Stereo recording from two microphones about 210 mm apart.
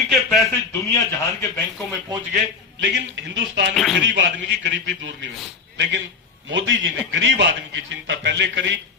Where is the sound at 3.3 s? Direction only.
55° right (ahead or behind).